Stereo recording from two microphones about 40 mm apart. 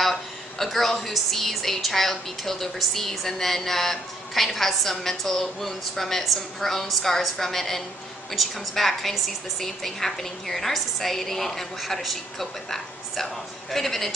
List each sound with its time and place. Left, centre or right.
0.0 s a woman's voice: centre